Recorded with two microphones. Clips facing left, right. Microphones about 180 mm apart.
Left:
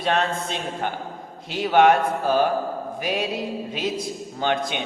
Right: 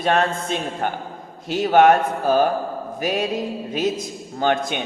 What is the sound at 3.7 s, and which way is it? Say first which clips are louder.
Speech: right 6 dB; 45° right (ahead or behind).